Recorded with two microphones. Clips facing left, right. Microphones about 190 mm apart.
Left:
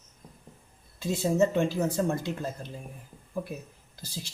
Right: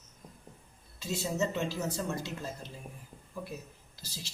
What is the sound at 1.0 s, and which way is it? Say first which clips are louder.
Speech: left 8 dB; 55° left (ahead or behind).